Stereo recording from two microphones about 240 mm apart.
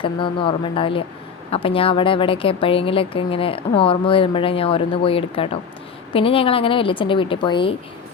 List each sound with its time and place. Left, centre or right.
0.0 s a woman's voice: left